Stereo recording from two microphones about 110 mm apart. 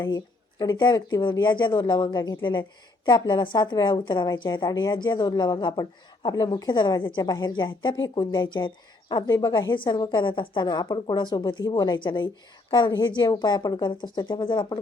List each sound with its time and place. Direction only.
0.6 s a woman's voice: 40° left (ahead or behind)